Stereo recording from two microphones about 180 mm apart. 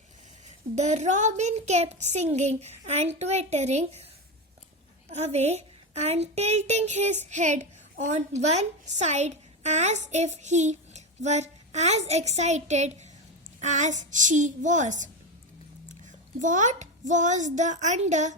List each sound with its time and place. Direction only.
0.4 s a child's voice: 40° right (ahead or behind)
5.1 s a child's voice: 40° right (ahead or behind)
16.4 s a child's voice: 45° right (ahead or behind)